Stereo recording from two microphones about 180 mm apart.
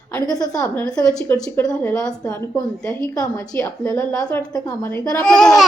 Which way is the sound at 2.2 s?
20° left (ahead or behind).